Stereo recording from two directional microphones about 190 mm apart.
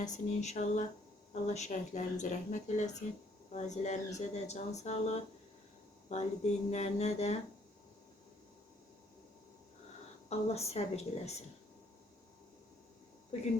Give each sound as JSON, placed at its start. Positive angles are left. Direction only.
{"t": 0.0, "sound": "speech", "side_deg": 40}
{"t": 6.1, "sound": "speech", "side_deg": 35}
{"t": 10.2, "sound": "speech", "side_deg": 35}